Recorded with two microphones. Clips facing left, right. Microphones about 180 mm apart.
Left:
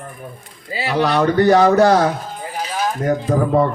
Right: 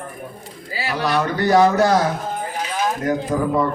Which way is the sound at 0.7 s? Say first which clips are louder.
Left 4 dB; 25° left (ahead or behind).